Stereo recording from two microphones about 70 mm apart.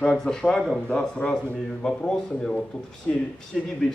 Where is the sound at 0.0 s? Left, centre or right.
Centre.